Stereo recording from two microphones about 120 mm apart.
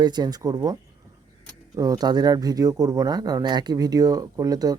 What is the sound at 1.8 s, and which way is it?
Speech, 30° right (ahead or behind).